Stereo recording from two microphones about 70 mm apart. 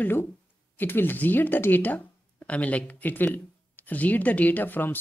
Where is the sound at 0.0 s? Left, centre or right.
Left.